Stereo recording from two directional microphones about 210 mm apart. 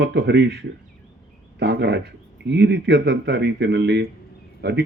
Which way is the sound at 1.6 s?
55° right (ahead or behind).